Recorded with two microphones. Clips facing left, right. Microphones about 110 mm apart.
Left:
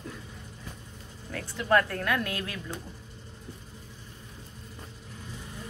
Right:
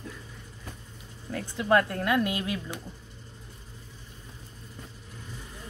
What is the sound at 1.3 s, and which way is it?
Speech, 20° right (ahead or behind).